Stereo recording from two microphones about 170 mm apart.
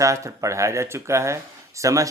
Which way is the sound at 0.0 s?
20° right (ahead or behind).